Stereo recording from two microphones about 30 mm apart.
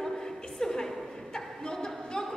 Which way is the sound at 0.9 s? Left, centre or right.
Centre.